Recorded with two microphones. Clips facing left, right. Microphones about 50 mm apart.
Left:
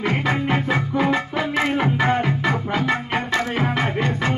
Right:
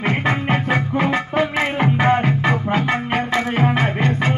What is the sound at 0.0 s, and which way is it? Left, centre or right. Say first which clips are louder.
Music: right 2 dB; right.